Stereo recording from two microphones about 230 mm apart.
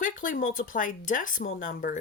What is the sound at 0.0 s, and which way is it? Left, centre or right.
Speech, left.